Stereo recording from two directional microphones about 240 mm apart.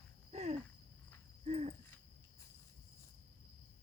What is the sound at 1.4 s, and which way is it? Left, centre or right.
Cricket, right.